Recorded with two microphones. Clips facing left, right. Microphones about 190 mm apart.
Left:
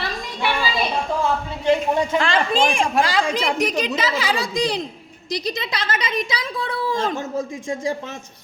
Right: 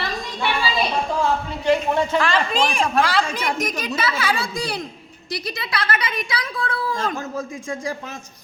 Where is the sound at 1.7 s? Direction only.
20° left (ahead or behind).